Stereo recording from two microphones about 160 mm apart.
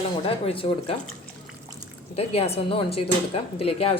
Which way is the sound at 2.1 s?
40° left (ahead or behind).